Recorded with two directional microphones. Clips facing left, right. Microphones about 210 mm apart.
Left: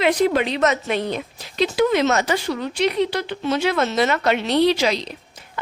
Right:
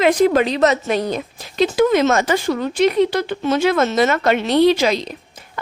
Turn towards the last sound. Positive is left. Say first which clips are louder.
# right 4 dB
turn(degrees=-50)  # may be behind; listen again after turning